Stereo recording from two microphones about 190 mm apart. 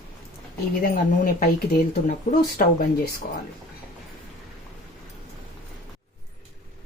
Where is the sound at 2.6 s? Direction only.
50° left (ahead or behind).